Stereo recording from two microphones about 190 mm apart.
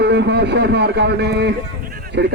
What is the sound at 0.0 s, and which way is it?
Speech, 60° right (ahead or behind).